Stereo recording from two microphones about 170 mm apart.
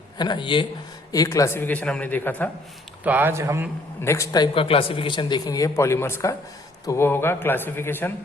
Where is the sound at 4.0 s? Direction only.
15° left (ahead or behind).